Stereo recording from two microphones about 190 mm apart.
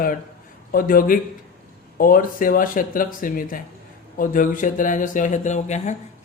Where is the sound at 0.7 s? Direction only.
50° left (ahead or behind).